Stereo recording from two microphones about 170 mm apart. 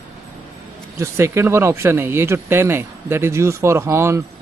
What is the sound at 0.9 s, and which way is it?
Speech, 15° right (ahead or behind).